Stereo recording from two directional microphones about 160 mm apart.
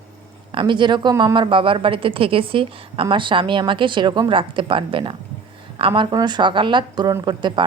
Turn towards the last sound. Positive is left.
turn(degrees=-30)  # may be behind; listen again after turning